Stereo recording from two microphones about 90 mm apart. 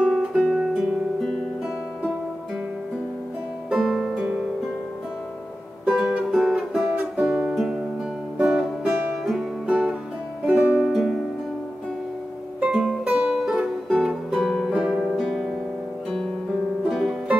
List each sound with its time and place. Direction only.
0.1 s music: 5° right (ahead or behind)
3.7 s music: centre (ahead or behind)
6.1 s music: 10° right (ahead or behind)
8.8 s music: centre (ahead or behind)
9.7 s music: 15° right (ahead or behind)
10.9 s music: 5° right (ahead or behind)
12.5 s music: 5° right (ahead or behind)
16.9 s music: centre (ahead or behind)